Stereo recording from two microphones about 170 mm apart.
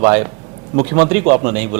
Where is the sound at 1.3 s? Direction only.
15° right (ahead or behind).